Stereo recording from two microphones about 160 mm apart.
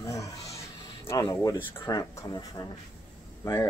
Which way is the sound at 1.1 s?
20° left (ahead or behind).